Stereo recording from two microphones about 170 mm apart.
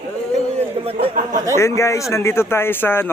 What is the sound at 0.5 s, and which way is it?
Speech, 35° right (ahead or behind).